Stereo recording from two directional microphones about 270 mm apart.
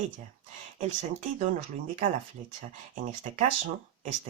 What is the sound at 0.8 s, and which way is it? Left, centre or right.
Speech, right.